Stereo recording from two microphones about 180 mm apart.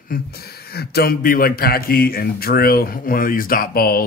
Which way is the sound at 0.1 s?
60° left (ahead or behind).